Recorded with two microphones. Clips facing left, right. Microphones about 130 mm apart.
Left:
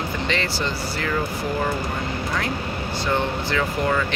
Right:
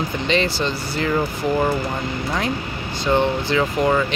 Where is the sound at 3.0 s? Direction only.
20° right (ahead or behind).